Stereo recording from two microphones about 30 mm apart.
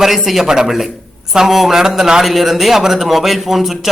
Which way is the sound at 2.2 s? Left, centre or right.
Centre.